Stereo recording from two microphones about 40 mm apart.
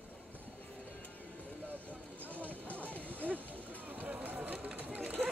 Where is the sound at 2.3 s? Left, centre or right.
Left.